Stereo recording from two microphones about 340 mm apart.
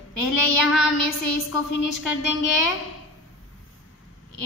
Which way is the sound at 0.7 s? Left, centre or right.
Left.